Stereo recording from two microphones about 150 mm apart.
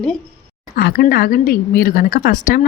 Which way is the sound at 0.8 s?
85° left.